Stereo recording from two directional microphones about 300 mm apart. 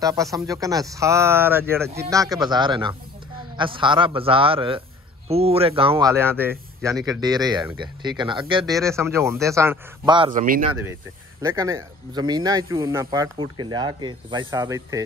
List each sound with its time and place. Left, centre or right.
0.0 s speech: centre
10.4 s speech: right
10.7 s speech: centre